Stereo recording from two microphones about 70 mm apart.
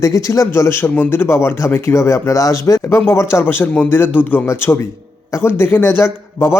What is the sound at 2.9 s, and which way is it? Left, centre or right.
A man's voice, left.